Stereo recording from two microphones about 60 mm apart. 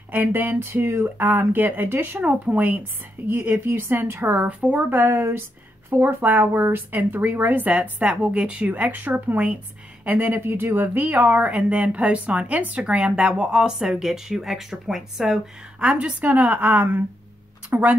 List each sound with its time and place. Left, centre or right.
0.1 s speech: right
4.5 s speech: right
4.8 s speech: right; by 15.4 s centre
15.8 s speech: right
17.7 s speech: right